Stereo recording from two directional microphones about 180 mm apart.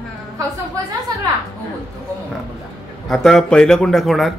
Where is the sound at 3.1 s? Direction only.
Centre (ahead or behind).